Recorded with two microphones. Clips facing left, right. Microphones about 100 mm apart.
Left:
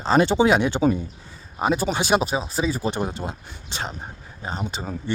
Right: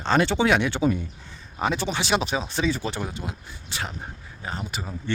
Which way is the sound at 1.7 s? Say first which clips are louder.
Left 6 dB; 40° left (ahead or behind).